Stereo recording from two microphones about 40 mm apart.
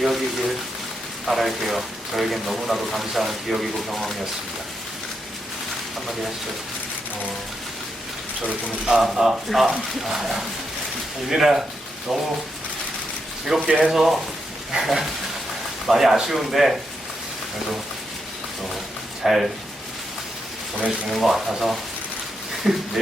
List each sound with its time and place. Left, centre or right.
0.0 s a sound: centre
1.3 s speech: centre
9.0 s speech: centre
13.7 s speech: right
13.9 s speech: centre
19.2 s speech: centre
21.1 s speech: centre